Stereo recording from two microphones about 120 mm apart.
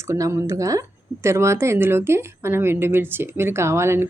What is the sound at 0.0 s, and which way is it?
Speech, 25° right (ahead or behind).